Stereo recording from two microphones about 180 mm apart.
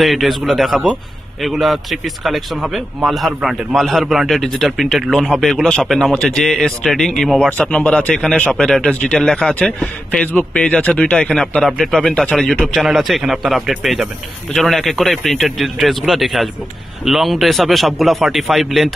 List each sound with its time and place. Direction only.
0.0 s speech: centre (ahead or behind)